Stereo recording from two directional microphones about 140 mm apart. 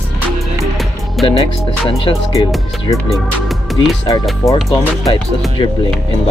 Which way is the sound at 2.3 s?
25° left (ahead or behind).